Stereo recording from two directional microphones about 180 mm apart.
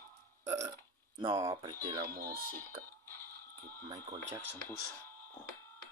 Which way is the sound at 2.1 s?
55° right (ahead or behind).